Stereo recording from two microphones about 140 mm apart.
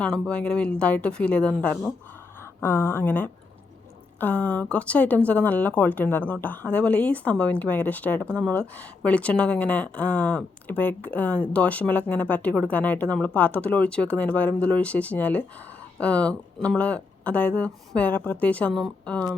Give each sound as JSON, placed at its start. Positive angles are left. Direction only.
{"t": 0.0, "sound": "speech", "side_deg": 5}